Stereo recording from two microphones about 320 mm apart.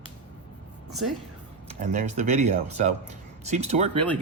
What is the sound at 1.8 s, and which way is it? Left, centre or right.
A man's voice, right.